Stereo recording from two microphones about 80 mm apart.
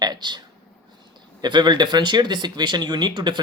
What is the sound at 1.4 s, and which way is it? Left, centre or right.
Speech, right.